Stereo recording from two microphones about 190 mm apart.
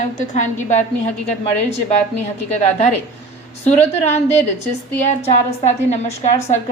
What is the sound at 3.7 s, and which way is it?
Speech, 35° left (ahead or behind).